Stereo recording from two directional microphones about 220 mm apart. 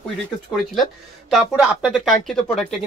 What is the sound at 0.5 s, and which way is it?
Speech, centre (ahead or behind).